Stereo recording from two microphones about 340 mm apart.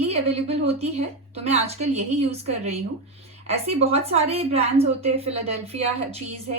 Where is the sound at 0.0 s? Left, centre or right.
Centre.